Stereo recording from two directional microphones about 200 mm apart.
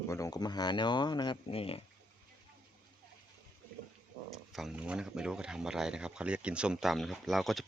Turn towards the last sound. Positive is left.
turn(degrees=0)  # may be behind; listen again after turning